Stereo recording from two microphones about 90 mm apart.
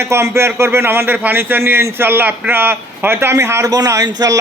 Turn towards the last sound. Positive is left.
turn(degrees=-40)  # may be behind; listen again after turning